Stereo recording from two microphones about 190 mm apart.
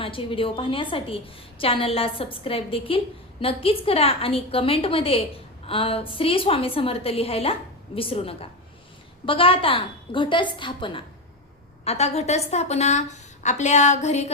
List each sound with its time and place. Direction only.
0.0 s a woman's voice: 30° left (ahead or behind)